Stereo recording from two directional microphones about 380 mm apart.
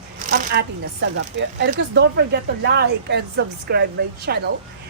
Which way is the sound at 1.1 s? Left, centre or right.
Right.